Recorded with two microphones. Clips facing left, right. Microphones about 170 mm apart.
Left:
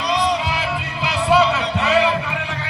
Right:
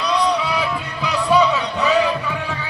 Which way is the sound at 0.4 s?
90° left.